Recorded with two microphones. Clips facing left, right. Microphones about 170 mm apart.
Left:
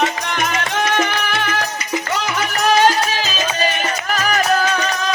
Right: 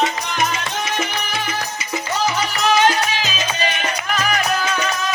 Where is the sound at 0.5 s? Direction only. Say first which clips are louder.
Left 5 dB; 65° left (ahead or behind).